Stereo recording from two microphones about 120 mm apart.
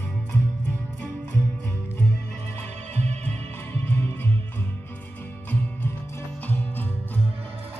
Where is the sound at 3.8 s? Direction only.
15° left (ahead or behind).